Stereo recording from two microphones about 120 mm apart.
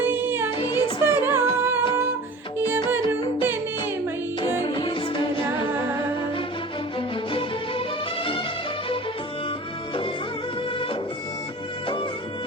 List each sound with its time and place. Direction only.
0.0 s music: 20° right (ahead or behind)
0.5 s music: 35° left (ahead or behind)
1.0 s singing: 20° right (ahead or behind)
4.4 s music: 35° left (ahead or behind)
7.3 s music: 50° left (ahead or behind)